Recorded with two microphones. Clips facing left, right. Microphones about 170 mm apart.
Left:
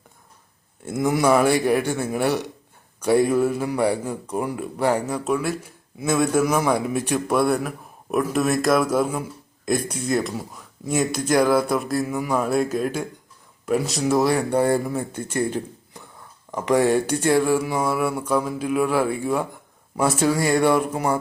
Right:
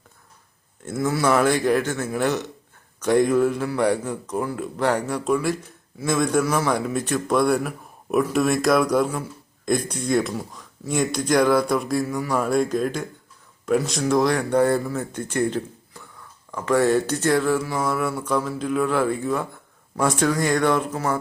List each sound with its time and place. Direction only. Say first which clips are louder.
0.8 s speech: left 2 dB; 15° left (ahead or behind)
15.9 s a sound: left 1 dB; 20° left (ahead or behind)
16.5 s speech: left 1 dB; 20° left (ahead or behind)